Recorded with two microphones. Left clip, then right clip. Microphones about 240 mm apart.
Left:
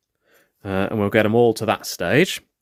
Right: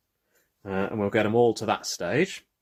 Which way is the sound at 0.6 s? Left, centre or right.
Left.